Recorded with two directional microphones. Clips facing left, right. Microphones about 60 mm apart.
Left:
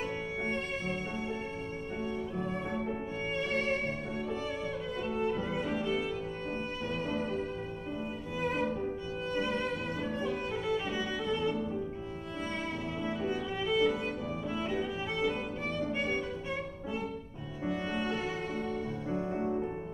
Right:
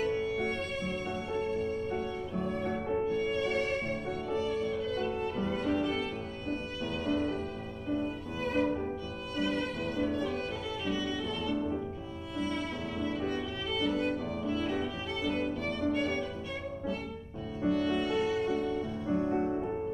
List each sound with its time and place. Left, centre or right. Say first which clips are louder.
3.1 s music: right 4 dB; left
4.5 s violin: right 4 dB; centre
9.3 s music: right 1 dB; left
13.0 s music: right 1 dB; centre
17.6 s music: right 4 dB; left
19.1 s music: right 3 dB; right